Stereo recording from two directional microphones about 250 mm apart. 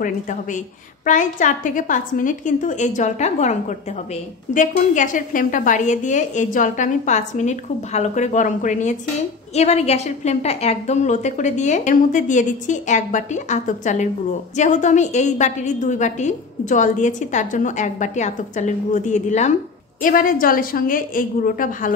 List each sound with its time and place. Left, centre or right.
0.0 s a woman's voice: left